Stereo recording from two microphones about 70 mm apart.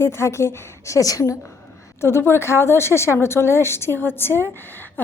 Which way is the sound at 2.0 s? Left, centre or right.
Left.